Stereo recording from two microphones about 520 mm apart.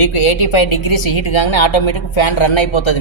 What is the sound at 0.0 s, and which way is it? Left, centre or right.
A woman's voice, left.